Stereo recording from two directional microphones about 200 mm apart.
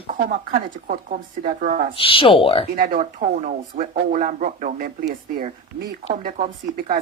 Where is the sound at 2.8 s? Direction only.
45° right (ahead or behind).